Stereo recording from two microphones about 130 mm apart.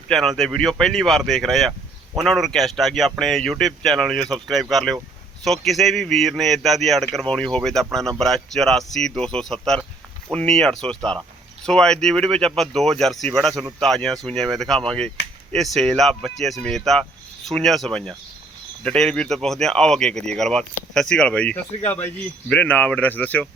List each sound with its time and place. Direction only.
0.1 s speech: centre (ahead or behind)